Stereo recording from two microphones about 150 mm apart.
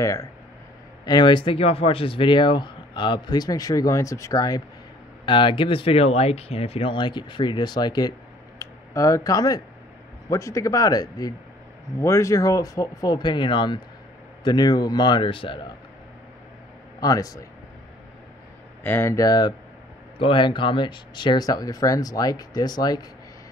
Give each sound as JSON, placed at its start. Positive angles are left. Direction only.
{"t": 0.0, "sound": "speech", "side_deg": 20}
{"t": 8.5, "sound": "a sound", "side_deg": 20}
{"t": 10.3, "sound": "speech", "side_deg": 20}
{"t": 17.0, "sound": "speech", "side_deg": 25}
{"t": 18.8, "sound": "speech", "side_deg": 15}